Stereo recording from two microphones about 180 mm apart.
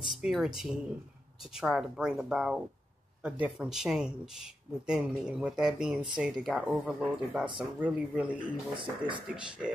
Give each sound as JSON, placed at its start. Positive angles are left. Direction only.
{"t": 0.1, "sound": "speech", "side_deg": 0}
{"t": 8.7, "sound": "speech", "side_deg": -25}